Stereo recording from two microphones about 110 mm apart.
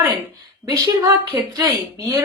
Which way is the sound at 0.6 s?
35° right (ahead or behind).